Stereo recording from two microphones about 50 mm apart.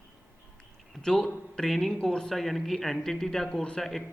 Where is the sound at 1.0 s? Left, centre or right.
Centre.